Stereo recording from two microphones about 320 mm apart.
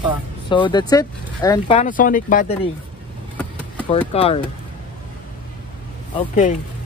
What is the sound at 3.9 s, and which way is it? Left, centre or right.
Speech, centre.